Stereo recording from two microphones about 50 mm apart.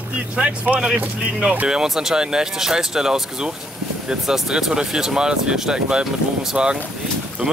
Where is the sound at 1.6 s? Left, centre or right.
Centre.